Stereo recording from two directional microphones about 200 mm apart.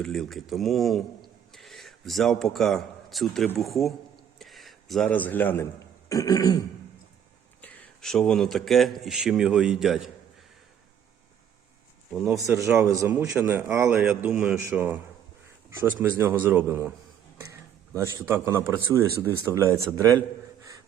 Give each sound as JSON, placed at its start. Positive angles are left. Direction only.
{"t": 0.0, "sound": "a man's voice", "side_deg": 0}
{"t": 4.4, "sound": "a sound", "side_deg": 0}
{"t": 6.1, "sound": "throat clearing", "side_deg": 15}
{"t": 7.6, "sound": "speech", "side_deg": 0}
{"t": 12.1, "sound": "speech", "side_deg": 0}
{"t": 12.4, "sound": "a man's voice", "side_deg": -15}
{"t": 17.4, "sound": "a sound", "side_deg": -15}
{"t": 18.5, "sound": "a man's voice", "side_deg": -15}